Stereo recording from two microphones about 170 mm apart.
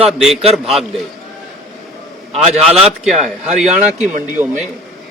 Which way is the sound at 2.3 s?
40° right (ahead or behind).